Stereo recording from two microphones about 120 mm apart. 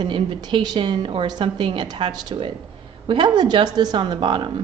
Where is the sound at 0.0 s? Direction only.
40° right (ahead or behind).